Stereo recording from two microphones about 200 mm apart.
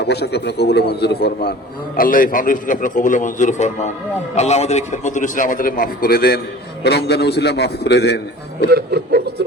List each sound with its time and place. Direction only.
0.0 s a man's voice: 55° left (ahead or behind)
8.7 s speech: 50° right (ahead or behind)